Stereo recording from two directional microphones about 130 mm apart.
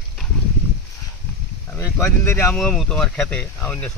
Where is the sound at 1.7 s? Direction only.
20° left (ahead or behind).